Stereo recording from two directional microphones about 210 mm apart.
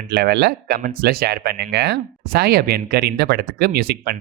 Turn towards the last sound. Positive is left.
turn(degrees=-50)  # may be behind; listen again after turning